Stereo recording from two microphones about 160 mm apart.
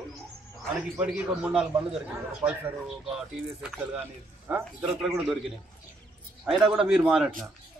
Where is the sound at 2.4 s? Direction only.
40° right (ahead or behind).